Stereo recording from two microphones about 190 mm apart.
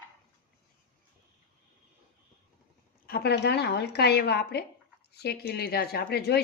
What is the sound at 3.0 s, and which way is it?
Speech, 55° left (ahead or behind).